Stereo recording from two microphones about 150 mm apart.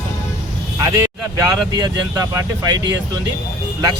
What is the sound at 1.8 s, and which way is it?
Speech, 20° right (ahead or behind).